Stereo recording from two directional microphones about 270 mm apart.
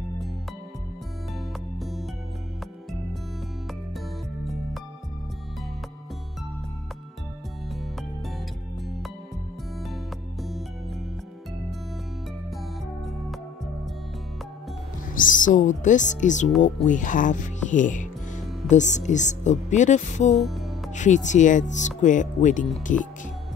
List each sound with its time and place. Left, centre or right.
1.8 s music: centre
8.8 s music: centre
15.1 s speech: left
20.3 s music: centre
20.9 s speech: left